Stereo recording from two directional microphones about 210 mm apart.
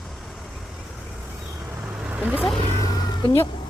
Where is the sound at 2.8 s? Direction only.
20° left (ahead or behind).